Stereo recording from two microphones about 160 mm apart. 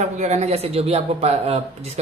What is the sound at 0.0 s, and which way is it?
A man's voice, 45° right (ahead or behind).